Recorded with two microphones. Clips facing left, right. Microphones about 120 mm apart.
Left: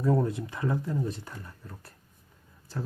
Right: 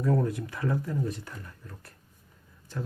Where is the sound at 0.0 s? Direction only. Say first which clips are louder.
Left 1 dB; 25° left (ahead or behind).